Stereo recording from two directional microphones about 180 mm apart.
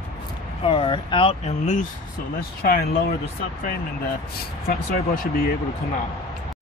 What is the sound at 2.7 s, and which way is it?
Speech, 60° left (ahead or behind).